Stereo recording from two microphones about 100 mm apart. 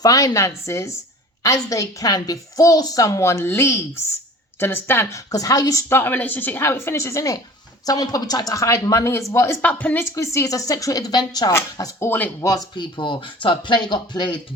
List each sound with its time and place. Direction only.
0.0 s a woman's voice: 40° left (ahead or behind); by 5.0 s 20° left (ahead or behind)
5.1 s a woman's voice: 35° left (ahead or behind)
5.9 s a woman's voice: 20° left (ahead or behind)
10.2 s a woman's voice: 30° left (ahead or behind)
12.0 s a woman's voice: 20° left (ahead or behind)
12.4 s a woman's voice: 35° left (ahead or behind)
12.7 s speech: 50° left (ahead or behind)